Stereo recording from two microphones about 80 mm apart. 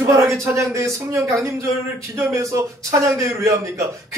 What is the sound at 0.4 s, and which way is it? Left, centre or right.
Speech, right.